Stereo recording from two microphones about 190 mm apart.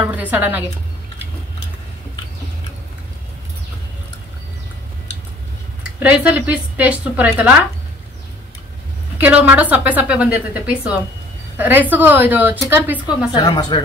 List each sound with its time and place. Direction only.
0.0 s a woman's voice: 10° right (ahead or behind)
5.9 s a woman's voice: 10° right (ahead or behind)
9.2 s a woman's voice: 10° right (ahead or behind)
13.3 s speech: 20° left (ahead or behind)